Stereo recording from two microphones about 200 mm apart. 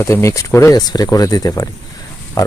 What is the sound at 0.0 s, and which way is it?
Speech, 15° left (ahead or behind).